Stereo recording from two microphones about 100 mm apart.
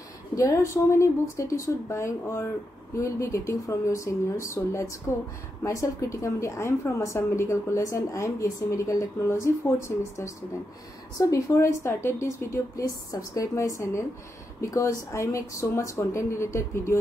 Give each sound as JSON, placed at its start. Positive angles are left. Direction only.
{"t": 0.4, "sound": "a woman's voice", "side_deg": 30}